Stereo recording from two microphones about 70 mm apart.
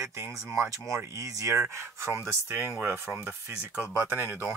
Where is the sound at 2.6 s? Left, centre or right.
Right.